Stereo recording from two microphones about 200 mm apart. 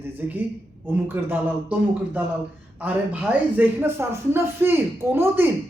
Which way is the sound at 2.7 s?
5° right (ahead or behind).